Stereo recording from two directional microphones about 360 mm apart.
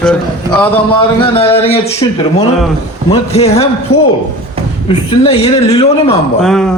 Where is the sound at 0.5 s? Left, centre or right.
Centre.